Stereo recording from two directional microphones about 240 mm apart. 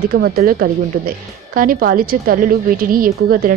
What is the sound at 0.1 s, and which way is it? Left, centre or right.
A woman's voice, right.